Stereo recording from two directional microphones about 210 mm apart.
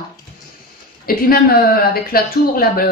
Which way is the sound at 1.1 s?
45° left (ahead or behind).